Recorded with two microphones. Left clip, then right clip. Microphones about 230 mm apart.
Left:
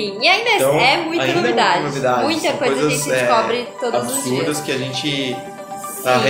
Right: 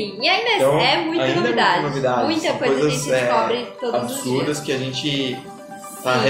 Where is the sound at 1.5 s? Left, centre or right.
Centre.